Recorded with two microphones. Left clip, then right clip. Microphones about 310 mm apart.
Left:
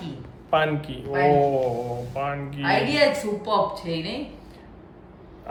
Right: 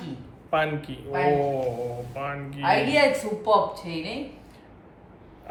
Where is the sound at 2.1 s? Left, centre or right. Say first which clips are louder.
Left 4 dB; centre.